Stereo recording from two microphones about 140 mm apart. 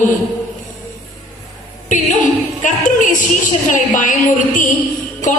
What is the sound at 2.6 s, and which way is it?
Music, 65° left (ahead or behind).